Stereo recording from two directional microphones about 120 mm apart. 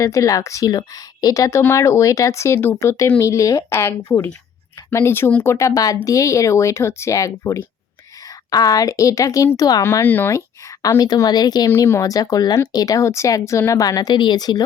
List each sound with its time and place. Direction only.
0.0 s speech: 25° left (ahead or behind)
9.8 s speech: 20° left (ahead or behind)
10.8 s speech: 30° left (ahead or behind)
11.7 s speech: 20° left (ahead or behind)